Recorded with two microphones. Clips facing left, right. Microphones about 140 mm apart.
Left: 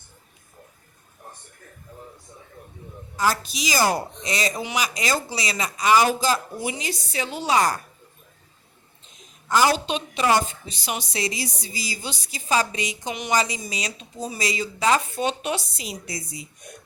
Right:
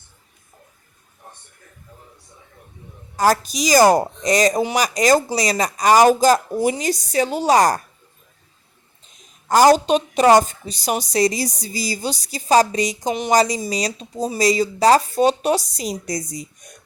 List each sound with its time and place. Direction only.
3.2 s a woman's voice: 45° right (ahead or behind)
9.5 s speech: 40° right (ahead or behind)